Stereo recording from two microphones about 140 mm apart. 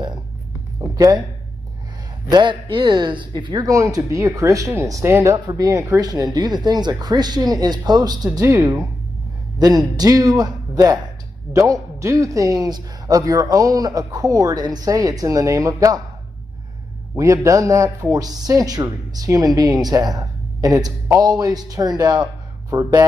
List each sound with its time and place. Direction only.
0.7 s a sound: 25° right (ahead or behind)
2.3 s a man's voice: 35° right (ahead or behind)
8.3 s a man's voice: 15° right (ahead or behind)
17.2 s a man's voice: 25° right (ahead or behind)